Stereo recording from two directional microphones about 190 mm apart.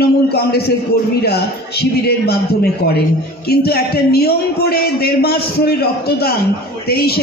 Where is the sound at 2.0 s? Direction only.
55° left (ahead or behind).